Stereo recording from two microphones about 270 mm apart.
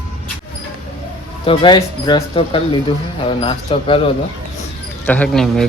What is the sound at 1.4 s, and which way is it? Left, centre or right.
Speech, centre.